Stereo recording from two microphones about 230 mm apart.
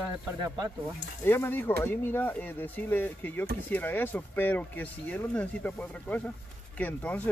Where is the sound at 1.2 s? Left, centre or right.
Centre.